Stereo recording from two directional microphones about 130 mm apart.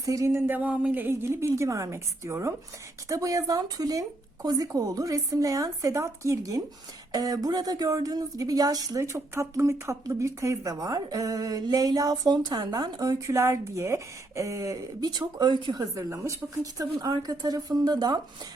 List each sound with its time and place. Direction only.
0.0 s a woman's voice: 25° right (ahead or behind)